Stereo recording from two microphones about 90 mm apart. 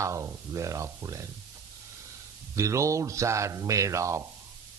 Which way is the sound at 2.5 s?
35° right (ahead or behind).